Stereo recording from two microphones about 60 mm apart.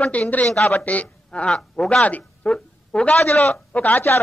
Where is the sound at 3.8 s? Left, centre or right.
Left.